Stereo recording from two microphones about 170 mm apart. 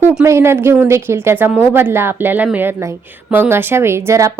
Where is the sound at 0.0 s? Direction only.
5° right (ahead or behind).